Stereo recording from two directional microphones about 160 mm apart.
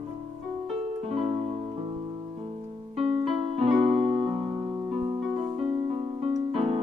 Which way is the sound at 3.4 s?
35° right (ahead or behind).